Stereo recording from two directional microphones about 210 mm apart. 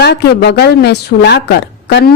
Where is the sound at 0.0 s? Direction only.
50° left (ahead or behind).